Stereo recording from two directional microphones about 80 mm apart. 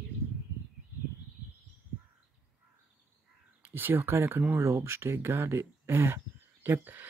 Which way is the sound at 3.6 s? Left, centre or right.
Right.